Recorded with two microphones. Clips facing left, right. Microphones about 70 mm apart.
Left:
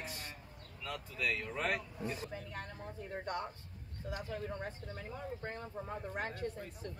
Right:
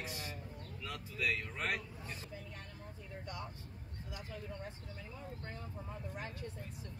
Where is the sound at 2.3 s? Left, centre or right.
Left.